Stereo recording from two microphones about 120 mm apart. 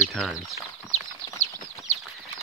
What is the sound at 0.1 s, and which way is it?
Speech, 5° left (ahead or behind).